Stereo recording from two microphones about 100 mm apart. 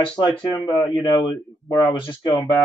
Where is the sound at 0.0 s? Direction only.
50° left (ahead or behind).